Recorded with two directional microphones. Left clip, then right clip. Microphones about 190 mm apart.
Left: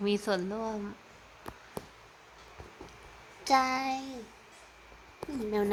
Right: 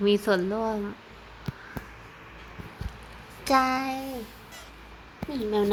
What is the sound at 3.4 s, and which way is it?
Child singing, 5° right (ahead or behind).